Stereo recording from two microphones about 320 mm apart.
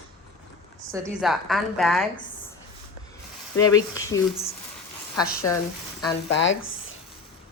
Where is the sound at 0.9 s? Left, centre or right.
Centre.